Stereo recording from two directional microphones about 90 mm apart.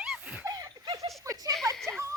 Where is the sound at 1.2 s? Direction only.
40° right (ahead or behind).